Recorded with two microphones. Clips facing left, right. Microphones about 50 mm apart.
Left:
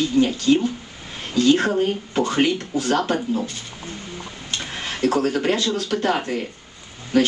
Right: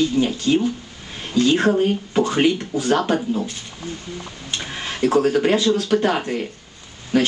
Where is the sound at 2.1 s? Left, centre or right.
Centre.